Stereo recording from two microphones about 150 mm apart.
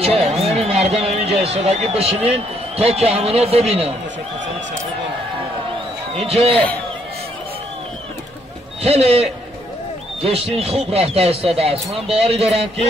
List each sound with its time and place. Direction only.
0.0 s a sound: 40° right (ahead or behind)
2.3 s a man's voice: 45° right (ahead or behind)
6.1 s speech: 40° right (ahead or behind)
8.8 s a man's voice: 40° right (ahead or behind)
10.2 s speech: 40° right (ahead or behind)